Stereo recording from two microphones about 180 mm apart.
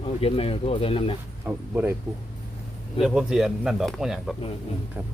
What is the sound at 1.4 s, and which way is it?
Speech, 10° right (ahead or behind).